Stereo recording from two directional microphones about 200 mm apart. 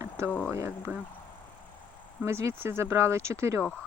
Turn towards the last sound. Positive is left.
turn(degrees=-15)  # may be behind; listen again after turning